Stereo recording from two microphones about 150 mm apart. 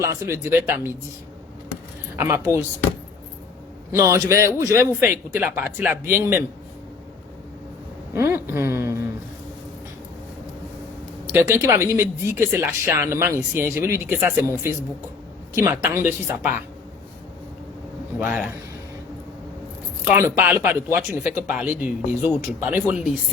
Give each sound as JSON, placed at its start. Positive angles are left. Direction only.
{"t": 0.0, "sound": "speech", "side_deg": -20}
{"t": 2.1, "sound": "speech", "side_deg": -15}
{"t": 3.9, "sound": "speech", "side_deg": -20}
{"t": 8.1, "sound": "a sound", "side_deg": -15}
{"t": 11.3, "sound": "speech", "side_deg": -15}
{"t": 18.2, "sound": "speech", "side_deg": -10}
{"t": 20.1, "sound": "speech", "side_deg": -15}